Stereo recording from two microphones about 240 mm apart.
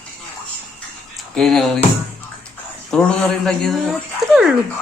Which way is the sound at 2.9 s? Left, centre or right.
Centre.